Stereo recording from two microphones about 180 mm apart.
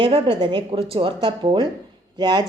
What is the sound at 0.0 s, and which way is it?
A woman's voice, 30° right (ahead or behind).